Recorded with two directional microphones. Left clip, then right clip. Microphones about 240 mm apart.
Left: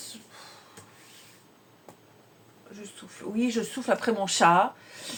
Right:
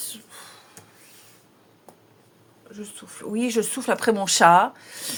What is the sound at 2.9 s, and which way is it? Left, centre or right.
Speech, right.